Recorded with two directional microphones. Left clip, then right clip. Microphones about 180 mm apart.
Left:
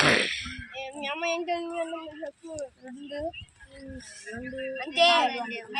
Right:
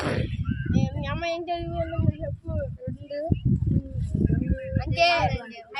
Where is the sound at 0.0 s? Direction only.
Centre (ahead or behind).